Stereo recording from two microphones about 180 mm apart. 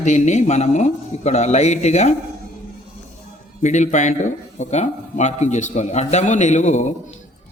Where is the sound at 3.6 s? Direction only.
40° left (ahead or behind).